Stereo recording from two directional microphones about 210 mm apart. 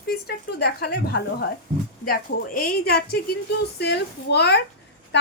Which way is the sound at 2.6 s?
50° left (ahead or behind).